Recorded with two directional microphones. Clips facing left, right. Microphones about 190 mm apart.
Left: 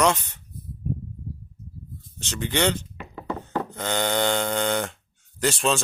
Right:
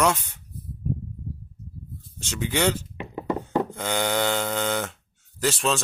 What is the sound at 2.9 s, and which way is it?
Mantra, 20° right (ahead or behind).